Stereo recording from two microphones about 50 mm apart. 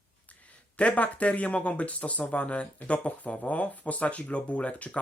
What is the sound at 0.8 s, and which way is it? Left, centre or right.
Speech, left.